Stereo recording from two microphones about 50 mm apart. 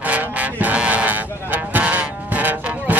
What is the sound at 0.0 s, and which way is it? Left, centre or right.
Music, right.